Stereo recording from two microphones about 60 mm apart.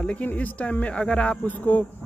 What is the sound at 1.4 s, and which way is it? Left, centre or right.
Speech, left.